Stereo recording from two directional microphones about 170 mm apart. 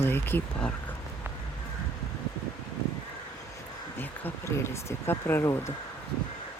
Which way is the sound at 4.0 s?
15° left (ahead or behind).